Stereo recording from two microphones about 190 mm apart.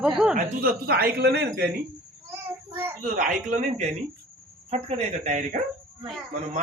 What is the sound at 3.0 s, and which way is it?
Speech, 40° right (ahead or behind).